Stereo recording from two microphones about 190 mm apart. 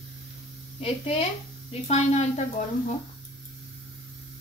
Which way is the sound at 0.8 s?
30° left (ahead or behind).